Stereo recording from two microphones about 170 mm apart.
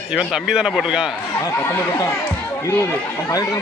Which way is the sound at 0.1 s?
5° right (ahead or behind).